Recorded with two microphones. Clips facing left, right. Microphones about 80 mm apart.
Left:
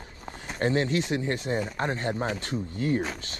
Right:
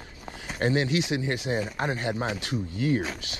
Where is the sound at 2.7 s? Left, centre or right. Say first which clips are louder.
Right 1 dB; right.